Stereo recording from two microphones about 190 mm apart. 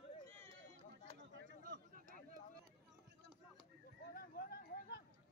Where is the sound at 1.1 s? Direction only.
65° right (ahead or behind).